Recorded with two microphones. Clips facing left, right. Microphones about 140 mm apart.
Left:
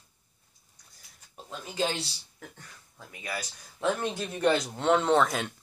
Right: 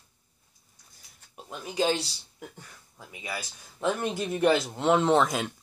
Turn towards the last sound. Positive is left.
turn(degrees=-10)  # may be behind; listen again after turning